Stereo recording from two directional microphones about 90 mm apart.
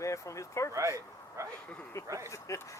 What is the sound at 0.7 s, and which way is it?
Speech, 35° right (ahead or behind).